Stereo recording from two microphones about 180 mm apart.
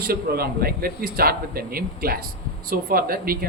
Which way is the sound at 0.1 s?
60° right (ahead or behind).